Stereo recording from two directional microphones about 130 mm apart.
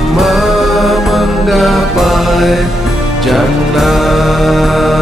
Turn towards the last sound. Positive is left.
turn(degrees=0)  # may be behind; listen again after turning